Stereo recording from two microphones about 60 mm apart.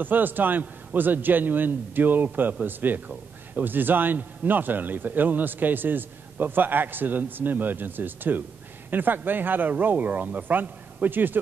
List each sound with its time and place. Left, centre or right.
0.0 s a man's voice: right